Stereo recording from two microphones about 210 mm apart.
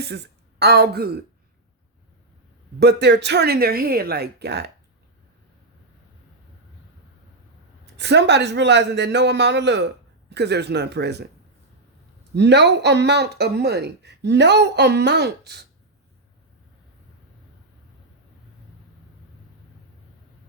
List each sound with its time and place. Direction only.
0.0 s speech: 50° right (ahead or behind)
2.8 s a man's voice: 55° right (ahead or behind)
7.9 s a man's voice: 55° right (ahead or behind)
12.3 s speech: 55° right (ahead or behind)